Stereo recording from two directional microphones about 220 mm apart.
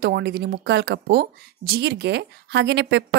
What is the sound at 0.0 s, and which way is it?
A woman's voice, 50° right (ahead or behind).